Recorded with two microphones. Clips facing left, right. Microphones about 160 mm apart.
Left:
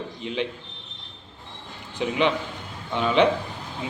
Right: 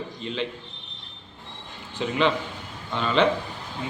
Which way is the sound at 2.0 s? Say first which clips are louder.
Even; 15° left (ahead or behind).